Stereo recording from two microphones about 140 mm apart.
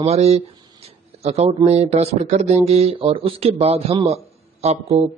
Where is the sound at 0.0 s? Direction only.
50° right (ahead or behind).